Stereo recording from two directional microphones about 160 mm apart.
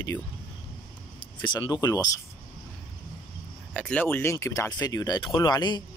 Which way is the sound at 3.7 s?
10° left (ahead or behind).